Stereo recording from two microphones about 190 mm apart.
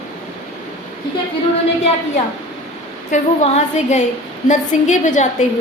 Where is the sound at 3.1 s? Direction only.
35° left (ahead or behind).